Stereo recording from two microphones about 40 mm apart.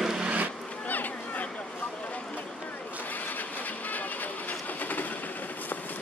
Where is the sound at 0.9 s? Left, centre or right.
Left.